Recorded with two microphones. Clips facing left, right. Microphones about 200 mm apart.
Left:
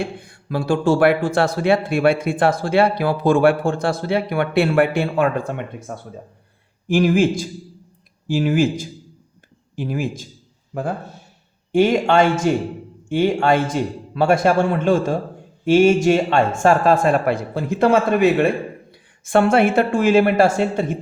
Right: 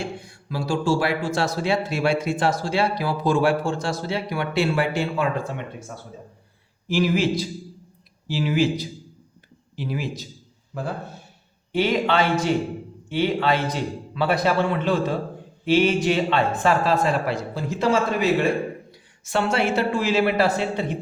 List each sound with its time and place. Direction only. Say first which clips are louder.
0.0 s a man's voice: left 4 dB; 55° left (ahead or behind)
11.7 s a man's voice: left 6 dB; 50° left (ahead or behind)